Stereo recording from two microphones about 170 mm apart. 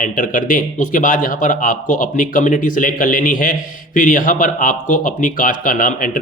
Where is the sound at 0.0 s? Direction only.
50° left (ahead or behind).